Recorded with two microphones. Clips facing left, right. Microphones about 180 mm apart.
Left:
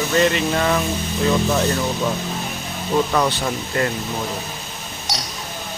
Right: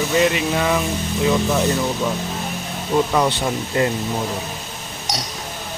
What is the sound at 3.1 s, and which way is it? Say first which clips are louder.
Speech: right 1 dB; 15° right (ahead or behind).